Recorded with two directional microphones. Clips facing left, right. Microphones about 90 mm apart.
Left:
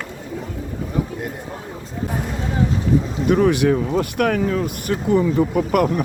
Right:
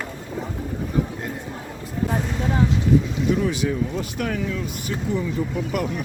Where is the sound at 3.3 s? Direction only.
60° left (ahead or behind).